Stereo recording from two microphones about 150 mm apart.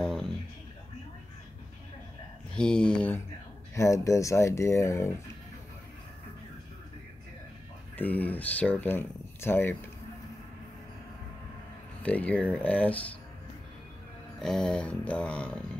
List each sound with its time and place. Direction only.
0.0 s a sound: centre (ahead or behind)
2.5 s speech: 5° left (ahead or behind)
3.7 s speech: 20° left (ahead or behind)
7.9 s speech: 10° left (ahead or behind)
12.0 s speech: 10° left (ahead or behind)
14.4 s speech: 5° left (ahead or behind)